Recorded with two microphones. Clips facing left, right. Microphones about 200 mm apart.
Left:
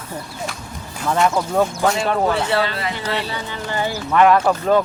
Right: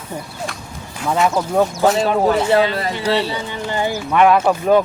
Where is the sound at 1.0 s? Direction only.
5° right (ahead or behind).